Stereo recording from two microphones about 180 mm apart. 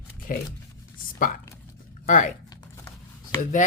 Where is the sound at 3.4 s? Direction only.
45° left (ahead or behind).